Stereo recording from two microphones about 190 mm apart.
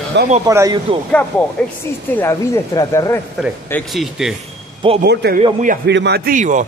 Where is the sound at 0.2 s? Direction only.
65° right (ahead or behind).